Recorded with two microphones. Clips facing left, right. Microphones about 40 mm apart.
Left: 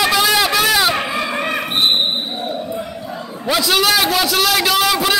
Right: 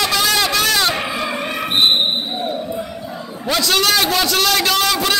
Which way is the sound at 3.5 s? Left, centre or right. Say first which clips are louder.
Left 1 dB; centre.